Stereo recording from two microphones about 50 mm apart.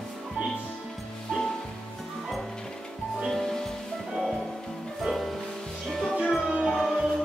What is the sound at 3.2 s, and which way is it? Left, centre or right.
Music, centre.